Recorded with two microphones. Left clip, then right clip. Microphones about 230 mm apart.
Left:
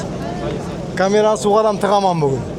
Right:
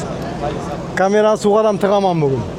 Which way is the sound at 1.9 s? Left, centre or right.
Right.